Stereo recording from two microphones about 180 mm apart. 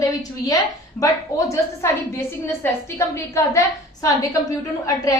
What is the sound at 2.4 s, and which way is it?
A woman's voice, 15° left (ahead or behind).